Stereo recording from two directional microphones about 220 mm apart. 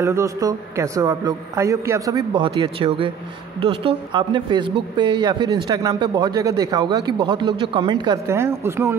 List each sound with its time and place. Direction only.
0.0 s a man's voice: 15° right (ahead or behind)